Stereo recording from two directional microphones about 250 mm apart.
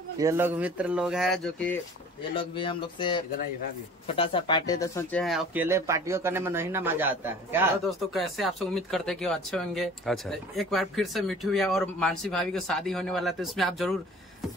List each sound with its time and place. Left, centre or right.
0.2 s speech: centre
2.3 s speech: centre
5.2 s speech: centre